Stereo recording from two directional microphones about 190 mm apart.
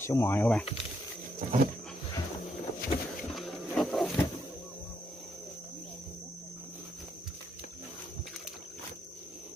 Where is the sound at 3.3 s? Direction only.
Centre (ahead or behind).